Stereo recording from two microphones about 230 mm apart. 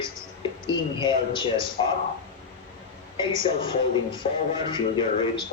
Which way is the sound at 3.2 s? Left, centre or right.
Left.